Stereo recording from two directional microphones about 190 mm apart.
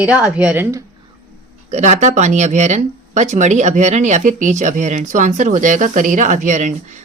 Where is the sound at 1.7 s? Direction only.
35° right (ahead or behind).